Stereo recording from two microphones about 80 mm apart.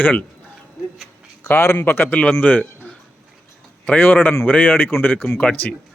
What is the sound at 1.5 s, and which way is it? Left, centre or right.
Speech, left.